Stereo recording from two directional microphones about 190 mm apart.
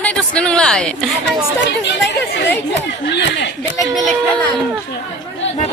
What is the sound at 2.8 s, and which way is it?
Speech, 65° left (ahead or behind).